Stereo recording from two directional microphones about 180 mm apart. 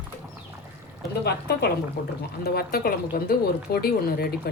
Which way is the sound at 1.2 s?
65° left (ahead or behind).